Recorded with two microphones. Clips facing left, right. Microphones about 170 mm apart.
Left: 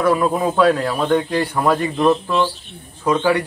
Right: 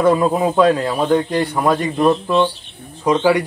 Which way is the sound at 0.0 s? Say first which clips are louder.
Right 2 dB; 20° right (ahead or behind).